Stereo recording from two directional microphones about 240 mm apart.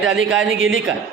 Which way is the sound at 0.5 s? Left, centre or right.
Right.